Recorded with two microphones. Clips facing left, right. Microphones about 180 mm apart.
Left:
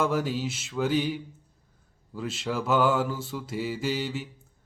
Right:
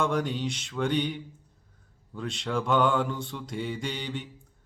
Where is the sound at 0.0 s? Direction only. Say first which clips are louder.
Left 1 dB; 5° left (ahead or behind).